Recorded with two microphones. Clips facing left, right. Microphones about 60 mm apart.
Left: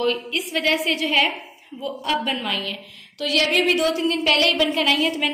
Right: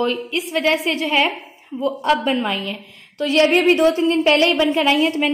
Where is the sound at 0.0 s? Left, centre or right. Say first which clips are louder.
Right 2 dB; centre.